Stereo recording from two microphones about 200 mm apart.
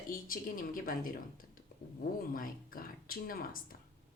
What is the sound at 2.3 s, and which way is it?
Speech, 45° left (ahead or behind).